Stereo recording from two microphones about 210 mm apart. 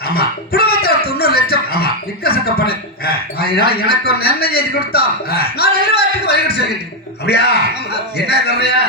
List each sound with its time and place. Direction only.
0.0 s a man's voice: 45° left (ahead or behind)